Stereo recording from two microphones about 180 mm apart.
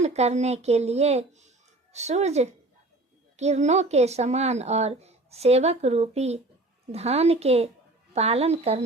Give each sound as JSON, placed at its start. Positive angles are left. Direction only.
{"t": 0.0, "sound": "speech", "side_deg": -35}